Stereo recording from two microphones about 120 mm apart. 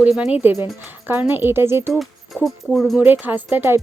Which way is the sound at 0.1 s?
10° right (ahead or behind).